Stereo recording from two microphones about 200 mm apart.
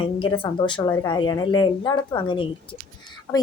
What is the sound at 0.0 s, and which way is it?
A woman's voice, 25° left (ahead or behind).